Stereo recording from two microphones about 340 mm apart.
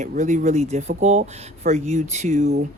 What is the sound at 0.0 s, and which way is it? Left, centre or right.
Speech, right.